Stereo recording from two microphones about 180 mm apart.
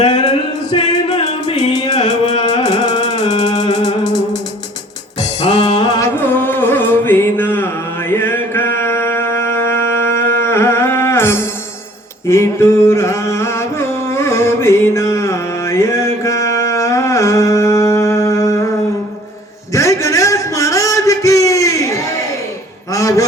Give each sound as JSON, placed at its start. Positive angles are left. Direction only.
{"t": 0.0, "sound": "music", "side_deg": 25}
{"t": 1.5, "sound": "music", "side_deg": 40}
{"t": 2.4, "sound": "music", "side_deg": 25}
{"t": 2.9, "sound": "music", "side_deg": 40}
{"t": 3.6, "sound": "music", "side_deg": 20}
{"t": 5.7, "sound": "music", "side_deg": 20}
{"t": 12.3, "sound": "a sound", "side_deg": 15}
{"t": 19.7, "sound": "a sound", "side_deg": 15}